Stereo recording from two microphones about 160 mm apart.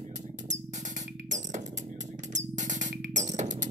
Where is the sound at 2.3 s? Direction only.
50° right (ahead or behind).